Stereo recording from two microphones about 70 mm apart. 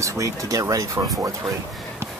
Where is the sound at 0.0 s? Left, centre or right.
Right.